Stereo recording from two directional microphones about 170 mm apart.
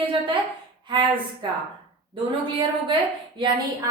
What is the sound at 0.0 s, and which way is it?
A woman's voice, 30° right (ahead or behind).